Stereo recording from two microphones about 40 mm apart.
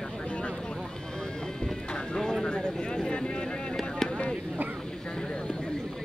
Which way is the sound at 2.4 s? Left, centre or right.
Left.